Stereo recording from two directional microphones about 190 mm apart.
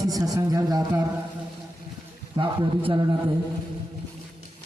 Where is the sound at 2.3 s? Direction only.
25° right (ahead or behind).